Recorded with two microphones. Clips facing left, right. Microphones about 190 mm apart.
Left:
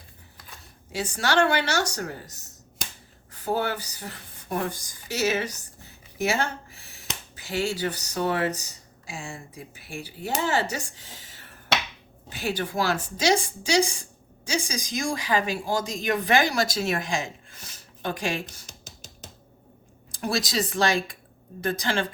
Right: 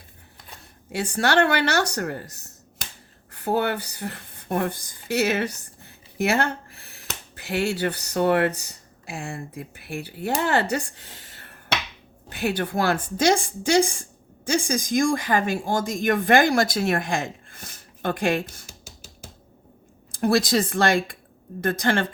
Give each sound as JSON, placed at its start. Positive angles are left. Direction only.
{"t": 0.9, "sound": "a woman's voice", "side_deg": -60}
{"t": 18.6, "sound": "music", "side_deg": -10}
{"t": 20.1, "sound": "a woman's voice", "side_deg": -55}